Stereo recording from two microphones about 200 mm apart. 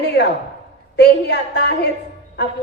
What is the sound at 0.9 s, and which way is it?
Speech, 60° left (ahead or behind).